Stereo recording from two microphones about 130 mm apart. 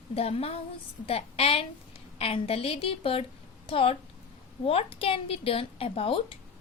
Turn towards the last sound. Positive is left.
turn(degrees=45)  # may be behind; listen again after turning